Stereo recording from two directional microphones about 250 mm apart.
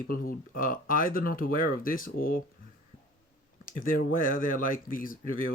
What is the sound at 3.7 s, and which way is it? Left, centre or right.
Speech, left.